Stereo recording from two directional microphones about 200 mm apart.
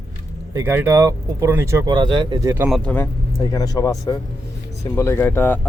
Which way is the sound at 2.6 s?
5° left (ahead or behind).